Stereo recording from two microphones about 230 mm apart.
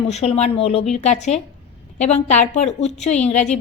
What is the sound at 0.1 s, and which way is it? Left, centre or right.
A woman's voice, left.